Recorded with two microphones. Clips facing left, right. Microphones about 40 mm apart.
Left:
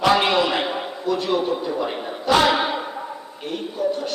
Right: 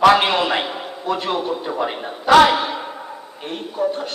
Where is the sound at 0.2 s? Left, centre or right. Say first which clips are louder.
Right 1 dB; right.